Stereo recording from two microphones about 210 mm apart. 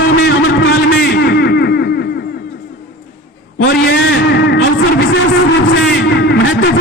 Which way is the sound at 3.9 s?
55° left (ahead or behind).